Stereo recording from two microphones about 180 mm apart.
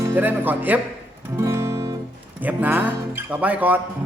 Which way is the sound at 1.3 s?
15° right (ahead or behind).